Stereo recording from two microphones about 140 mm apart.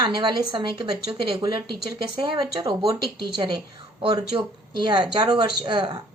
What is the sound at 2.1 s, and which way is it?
Speech, 35° right (ahead or behind).